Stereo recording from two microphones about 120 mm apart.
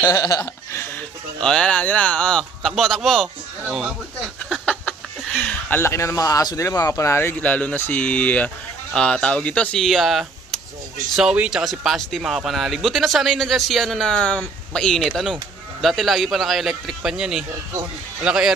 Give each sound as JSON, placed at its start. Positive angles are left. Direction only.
{"t": 0.0, "sound": "speech", "side_deg": 25}
{"t": 1.4, "sound": "speech", "side_deg": 5}
{"t": 4.6, "sound": "speech", "side_deg": 10}